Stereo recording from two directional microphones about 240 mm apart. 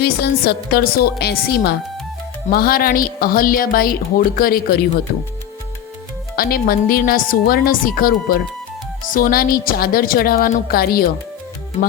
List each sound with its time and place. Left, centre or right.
0.0 s speech: left
6.3 s speech: left